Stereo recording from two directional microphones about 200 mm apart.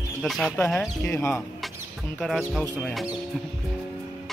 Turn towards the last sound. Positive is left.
turn(degrees=0)  # may be behind; listen again after turning